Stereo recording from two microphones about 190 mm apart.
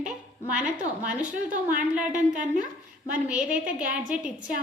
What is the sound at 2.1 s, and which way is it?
Speech, 40° right (ahead or behind).